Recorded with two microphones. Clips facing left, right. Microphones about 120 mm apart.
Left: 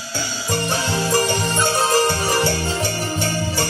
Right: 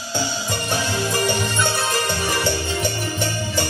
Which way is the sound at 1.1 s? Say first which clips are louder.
Left 4 dB; 40° left (ahead or behind).